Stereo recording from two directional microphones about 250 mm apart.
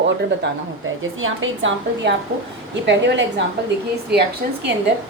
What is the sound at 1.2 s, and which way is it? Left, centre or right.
A woman's voice, right.